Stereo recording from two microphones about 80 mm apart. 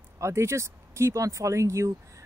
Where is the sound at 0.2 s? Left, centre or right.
Right.